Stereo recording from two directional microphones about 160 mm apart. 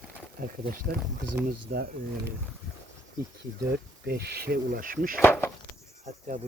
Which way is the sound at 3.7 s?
90° right.